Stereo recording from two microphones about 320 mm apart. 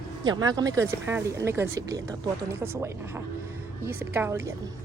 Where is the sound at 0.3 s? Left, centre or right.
Centre.